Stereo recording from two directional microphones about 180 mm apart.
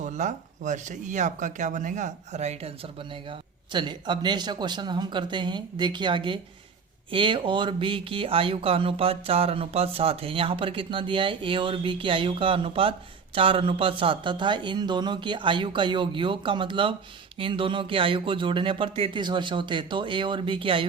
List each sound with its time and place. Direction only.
0.0 s speech: 45° right (ahead or behind)
3.2 s speech: 25° right (ahead or behind)